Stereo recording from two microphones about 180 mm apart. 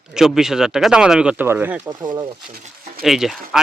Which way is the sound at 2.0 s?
25° right (ahead or behind).